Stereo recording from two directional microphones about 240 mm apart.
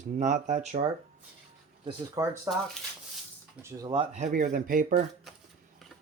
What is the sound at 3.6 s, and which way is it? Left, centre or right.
Speech, centre.